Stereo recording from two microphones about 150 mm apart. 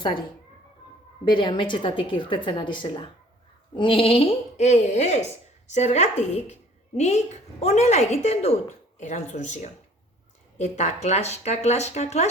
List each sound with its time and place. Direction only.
1.2 s a woman's voice: 30° left (ahead or behind); by 12.3 s 50° left (ahead or behind)